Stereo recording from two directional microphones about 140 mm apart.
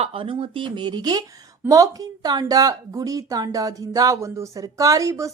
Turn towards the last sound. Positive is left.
turn(degrees=-25)  # may be behind; listen again after turning